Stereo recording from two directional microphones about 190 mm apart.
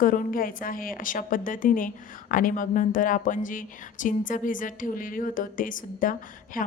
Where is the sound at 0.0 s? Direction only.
45° left (ahead or behind).